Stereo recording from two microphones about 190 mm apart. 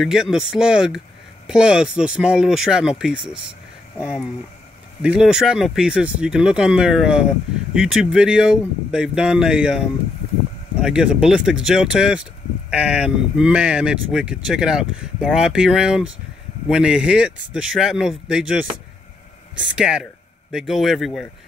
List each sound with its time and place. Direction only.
0.0 s speech: 5° right (ahead or behind)
5.0 s speech: 5° right (ahead or behind)